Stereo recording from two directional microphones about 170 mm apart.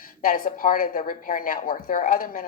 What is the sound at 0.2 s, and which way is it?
A woman's voice, 55° left (ahead or behind).